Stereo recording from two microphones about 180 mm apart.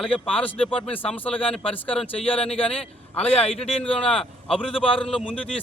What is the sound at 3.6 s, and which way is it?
Speech, 5° left (ahead or behind).